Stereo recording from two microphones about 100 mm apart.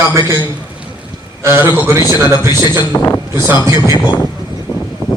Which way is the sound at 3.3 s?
25° right (ahead or behind).